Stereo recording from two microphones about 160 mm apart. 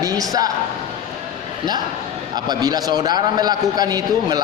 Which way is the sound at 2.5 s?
25° right (ahead or behind).